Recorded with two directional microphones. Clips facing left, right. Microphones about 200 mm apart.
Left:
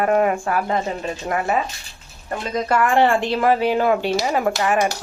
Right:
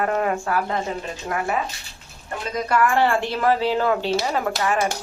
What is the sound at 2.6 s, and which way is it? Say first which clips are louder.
Speech: left 2 dB; 20° left (ahead or behind).